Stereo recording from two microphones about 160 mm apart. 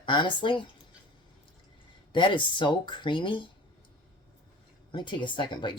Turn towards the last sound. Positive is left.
turn(degrees=30)  # may be behind; listen again after turning